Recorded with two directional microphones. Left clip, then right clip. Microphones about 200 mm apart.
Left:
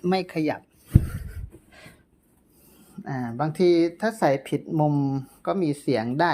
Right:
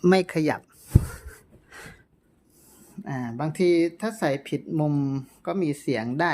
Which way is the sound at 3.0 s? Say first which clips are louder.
Left 3 dB; 5° right (ahead or behind).